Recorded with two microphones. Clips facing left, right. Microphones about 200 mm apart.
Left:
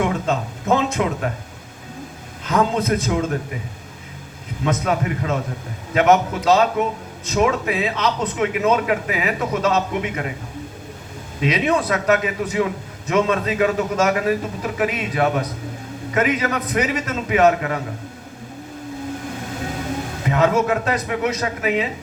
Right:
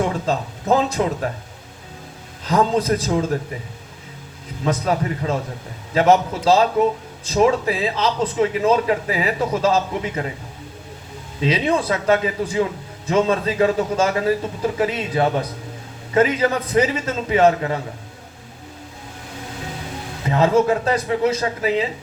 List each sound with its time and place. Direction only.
0.0 s a man's voice: 35° right (ahead or behind)
2.4 s a man's voice: 35° right (ahead or behind)
4.6 s a man's voice: 35° right (ahead or behind)
11.3 s a man's voice: 30° right (ahead or behind)
20.2 s a man's voice: 30° right (ahead or behind)